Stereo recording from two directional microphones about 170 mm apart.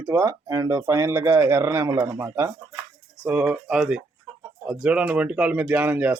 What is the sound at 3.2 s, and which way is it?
Speech, 10° right (ahead or behind).